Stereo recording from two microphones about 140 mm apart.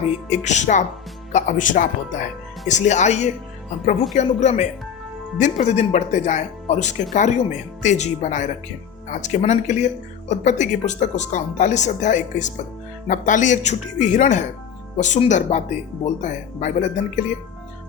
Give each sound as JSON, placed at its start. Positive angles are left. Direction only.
{"t": 0.0, "sound": "speech", "side_deg": 55}